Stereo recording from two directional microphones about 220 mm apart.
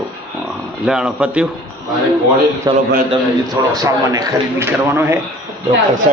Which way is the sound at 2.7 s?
20° right (ahead or behind).